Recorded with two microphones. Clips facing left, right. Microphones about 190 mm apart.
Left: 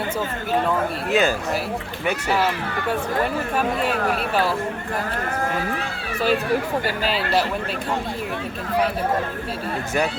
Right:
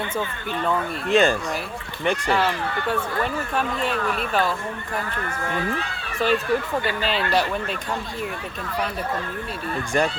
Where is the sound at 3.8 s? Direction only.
40° left (ahead or behind).